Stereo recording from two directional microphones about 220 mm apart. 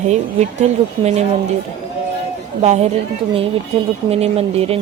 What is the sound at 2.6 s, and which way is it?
Speech, 30° right (ahead or behind).